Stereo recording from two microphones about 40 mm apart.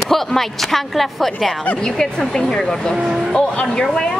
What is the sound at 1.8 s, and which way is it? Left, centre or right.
Speech, centre.